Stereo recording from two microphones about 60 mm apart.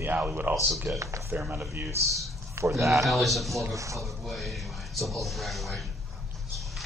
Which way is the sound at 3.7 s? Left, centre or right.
Right.